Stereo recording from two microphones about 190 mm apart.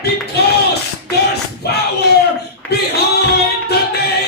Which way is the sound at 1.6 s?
60° left (ahead or behind).